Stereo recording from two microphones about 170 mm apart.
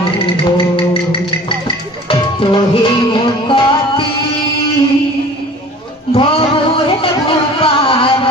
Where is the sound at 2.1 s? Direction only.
30° left (ahead or behind).